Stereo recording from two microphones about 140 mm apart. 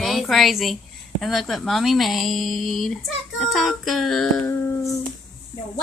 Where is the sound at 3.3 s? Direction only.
Centre (ahead or behind).